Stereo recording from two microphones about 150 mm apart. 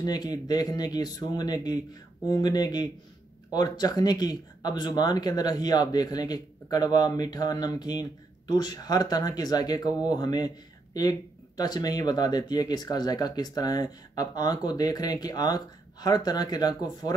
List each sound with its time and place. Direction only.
0.0 s speech: 25° left (ahead or behind)